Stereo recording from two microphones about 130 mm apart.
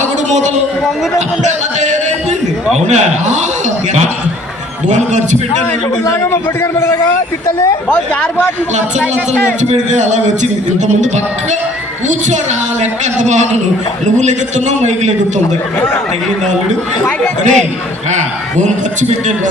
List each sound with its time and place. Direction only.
1.8 s a sound: 65° right (ahead or behind)
2.7 s a man's voice: 60° right (ahead or behind)
4.9 s a man's voice: 70° right (ahead or behind)
6.3 s a man's voice: 20° left (ahead or behind)
9.6 s a man's voice: 65° right (ahead or behind)
12.8 s a man's voice: 65° right (ahead or behind)
17.1 s speech: 10° left (ahead or behind)
18.1 s a man's voice: 65° right (ahead or behind)